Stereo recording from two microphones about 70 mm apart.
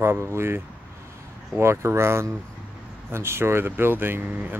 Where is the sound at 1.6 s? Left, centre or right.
Right.